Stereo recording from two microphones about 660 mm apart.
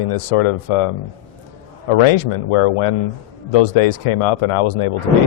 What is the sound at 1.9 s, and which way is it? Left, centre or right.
Speech, left.